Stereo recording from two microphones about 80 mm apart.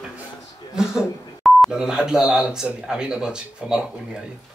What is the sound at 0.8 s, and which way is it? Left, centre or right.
Speech, centre.